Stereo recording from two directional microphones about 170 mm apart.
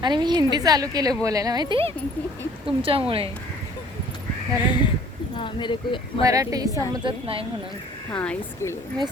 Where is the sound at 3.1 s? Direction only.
35° right (ahead or behind).